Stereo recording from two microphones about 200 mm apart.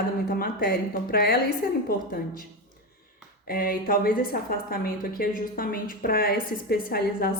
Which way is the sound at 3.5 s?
45° left (ahead or behind).